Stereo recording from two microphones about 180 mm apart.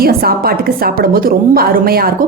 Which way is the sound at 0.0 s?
55° right (ahead or behind).